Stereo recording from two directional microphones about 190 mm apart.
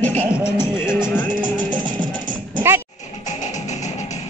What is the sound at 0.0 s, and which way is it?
Music, 10° left (ahead or behind).